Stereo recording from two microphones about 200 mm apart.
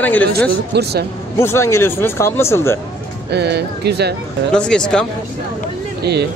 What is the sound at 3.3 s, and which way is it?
Speech, 55° right (ahead or behind).